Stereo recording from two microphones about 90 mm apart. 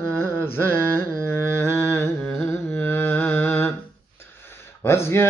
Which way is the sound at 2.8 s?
20° left (ahead or behind).